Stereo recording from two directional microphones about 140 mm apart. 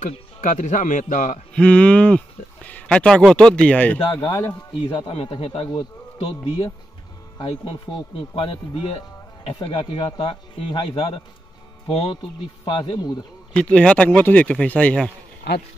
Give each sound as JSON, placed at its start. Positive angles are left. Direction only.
{"t": 0.0, "sound": "speech", "side_deg": 65}
{"t": 1.5, "sound": "a man's voice", "side_deg": 10}
{"t": 5.1, "sound": "a man's voice", "side_deg": 40}
{"t": 8.4, "sound": "a man's voice", "side_deg": 40}
{"t": 13.6, "sound": "speech", "side_deg": 10}